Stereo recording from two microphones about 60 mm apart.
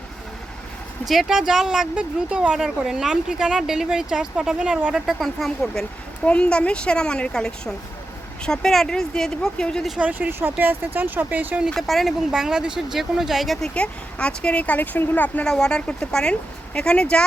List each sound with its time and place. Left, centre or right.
1.0 s speech: centre
2.6 s speech: centre
5.8 s a woman's voice: centre
10.0 s speech: right
11.7 s speech: centre
12.3 s speech: centre
13.7 s speech: centre
15.4 s a woman's voice: centre